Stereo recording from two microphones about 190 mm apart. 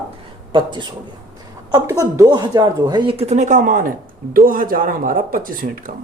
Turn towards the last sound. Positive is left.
turn(degrees=-50)  # may be behind; listen again after turning